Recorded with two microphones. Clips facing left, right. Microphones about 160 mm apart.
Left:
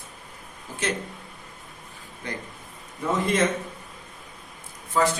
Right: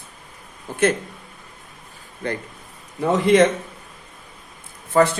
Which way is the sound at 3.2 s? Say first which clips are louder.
Right 9 dB; 75° right (ahead or behind).